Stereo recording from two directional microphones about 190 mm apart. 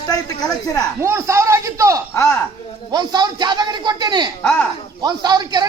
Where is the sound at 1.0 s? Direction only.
15° right (ahead or behind).